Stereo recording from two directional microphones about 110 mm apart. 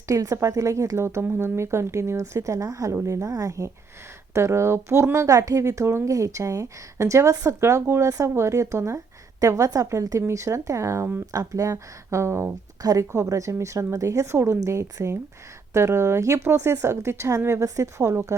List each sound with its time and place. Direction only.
0.1 s speech: 30° right (ahead or behind)